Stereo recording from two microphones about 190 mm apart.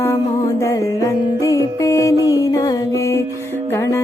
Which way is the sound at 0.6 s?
15° left (ahead or behind).